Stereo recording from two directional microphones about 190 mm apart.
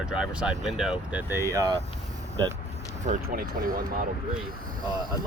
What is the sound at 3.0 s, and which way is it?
Speech, 45° right (ahead or behind).